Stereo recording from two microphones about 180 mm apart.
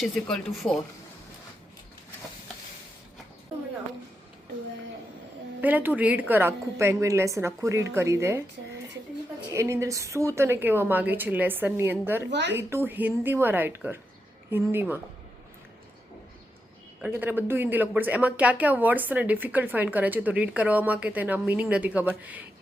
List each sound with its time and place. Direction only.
0.0 s speech: centre (ahead or behind)
5.6 s a woman's voice: 10° right (ahead or behind)
9.5 s a woman's voice: 15° right (ahead or behind)
12.2 s speech: 75° right (ahead or behind)
12.5 s a woman's voice: 15° right (ahead or behind)
17.0 s a woman's voice: 10° right (ahead or behind)